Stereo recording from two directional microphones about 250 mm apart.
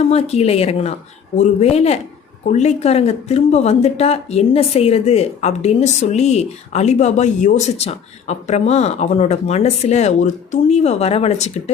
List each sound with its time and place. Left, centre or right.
0.1 s speech: left